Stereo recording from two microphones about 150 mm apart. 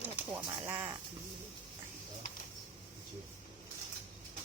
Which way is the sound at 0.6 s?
15° right (ahead or behind).